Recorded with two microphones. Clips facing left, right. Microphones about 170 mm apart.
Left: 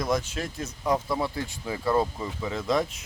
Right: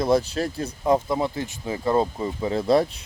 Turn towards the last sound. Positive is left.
turn(degrees=-35)  # may be behind; listen again after turning